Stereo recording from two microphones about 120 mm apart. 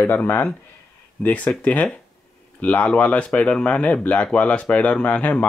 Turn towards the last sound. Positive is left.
turn(degrees=10)  # may be behind; listen again after turning